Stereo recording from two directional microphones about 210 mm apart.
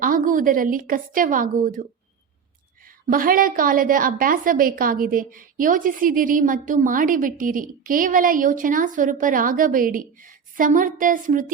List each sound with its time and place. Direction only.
0.0 s a woman's voice: 40° right (ahead or behind)
2.8 s a woman's voice: 40° right (ahead or behind)